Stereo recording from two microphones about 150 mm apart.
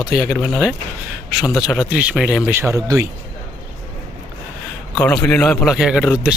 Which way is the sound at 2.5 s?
15° right (ahead or behind).